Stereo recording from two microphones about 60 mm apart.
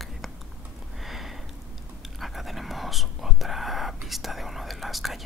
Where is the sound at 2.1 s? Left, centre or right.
Centre.